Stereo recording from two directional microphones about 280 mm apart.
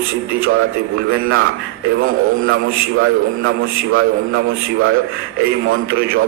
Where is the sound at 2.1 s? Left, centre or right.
Right.